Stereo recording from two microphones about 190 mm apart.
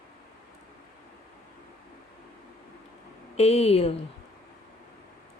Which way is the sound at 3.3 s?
35° left (ahead or behind).